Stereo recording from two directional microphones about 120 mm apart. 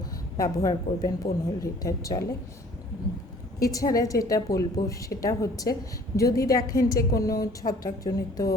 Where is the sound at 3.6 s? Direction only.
30° left (ahead or behind).